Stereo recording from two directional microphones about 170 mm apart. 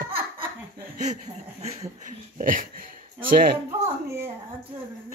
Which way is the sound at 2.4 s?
55° right (ahead or behind).